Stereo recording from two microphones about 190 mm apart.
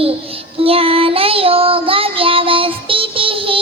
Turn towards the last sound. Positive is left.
turn(degrees=-30)  # may be behind; listen again after turning